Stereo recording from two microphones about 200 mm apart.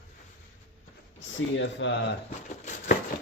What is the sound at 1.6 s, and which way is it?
Speech, 65° left (ahead or behind).